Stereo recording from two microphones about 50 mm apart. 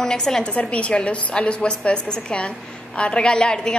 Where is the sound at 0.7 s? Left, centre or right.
Left.